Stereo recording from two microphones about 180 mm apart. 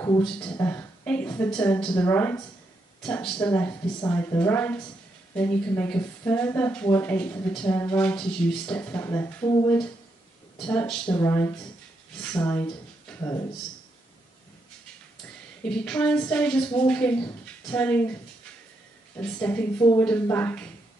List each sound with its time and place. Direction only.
0.2 s a woman's voice: 5° left (ahead or behind)
10.7 s speech: 10° left (ahead or behind)
15.6 s speech: 5° left (ahead or behind)
19.1 s speech: 10° left (ahead or behind)